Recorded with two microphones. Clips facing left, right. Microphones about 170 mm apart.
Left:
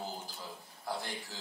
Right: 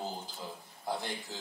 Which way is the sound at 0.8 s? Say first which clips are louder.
Right 3 dB; 20° right (ahead or behind).